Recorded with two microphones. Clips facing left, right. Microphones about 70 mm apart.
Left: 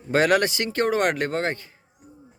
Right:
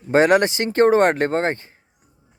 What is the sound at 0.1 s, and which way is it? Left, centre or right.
Speech, right.